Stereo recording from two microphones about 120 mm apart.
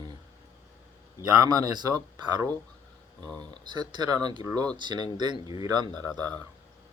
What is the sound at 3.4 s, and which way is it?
Speech, 40° right (ahead or behind).